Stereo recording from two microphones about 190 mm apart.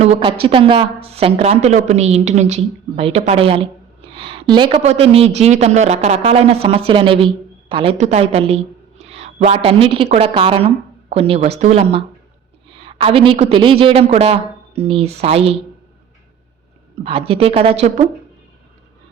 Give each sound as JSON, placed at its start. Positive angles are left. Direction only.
{"t": 0.0, "sound": "a woman's voice", "side_deg": -30}
{"t": 17.0, "sound": "a man's voice", "side_deg": -30}